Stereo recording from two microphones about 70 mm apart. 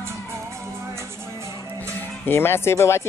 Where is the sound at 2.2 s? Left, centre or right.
Left.